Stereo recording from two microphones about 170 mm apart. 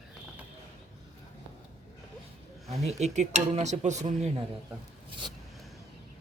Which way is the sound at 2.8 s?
40° right (ahead or behind).